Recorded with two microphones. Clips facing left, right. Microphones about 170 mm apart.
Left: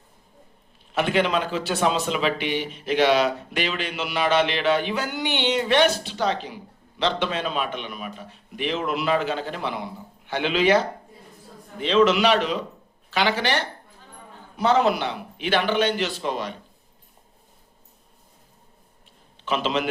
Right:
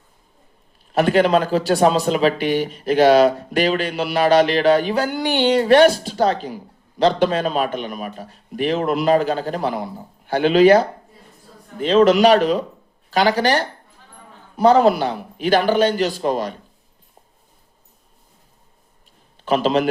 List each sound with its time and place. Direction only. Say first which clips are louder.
0.9 s speech: right 7 dB; 40° right (ahead or behind)
19.5 s speech: right 7 dB; 40° right (ahead or behind)